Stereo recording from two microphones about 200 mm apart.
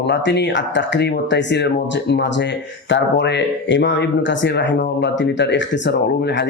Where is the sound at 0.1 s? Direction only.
60° left (ahead or behind).